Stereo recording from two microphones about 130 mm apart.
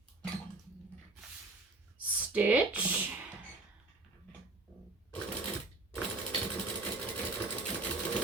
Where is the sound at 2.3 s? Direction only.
10° right (ahead or behind).